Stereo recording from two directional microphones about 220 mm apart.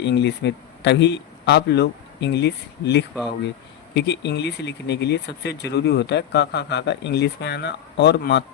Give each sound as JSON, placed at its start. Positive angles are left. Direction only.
{"t": 0.0, "sound": "speech", "side_deg": 50}